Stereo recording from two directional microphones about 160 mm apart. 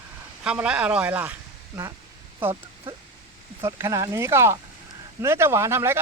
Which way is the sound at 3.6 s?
20° right (ahead or behind).